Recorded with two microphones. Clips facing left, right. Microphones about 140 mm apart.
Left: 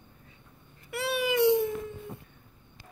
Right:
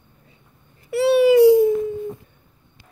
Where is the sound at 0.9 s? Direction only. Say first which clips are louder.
Right 15 dB; 30° right (ahead or behind).